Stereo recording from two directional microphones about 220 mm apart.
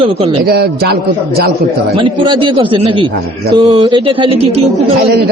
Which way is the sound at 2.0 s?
20° right (ahead or behind).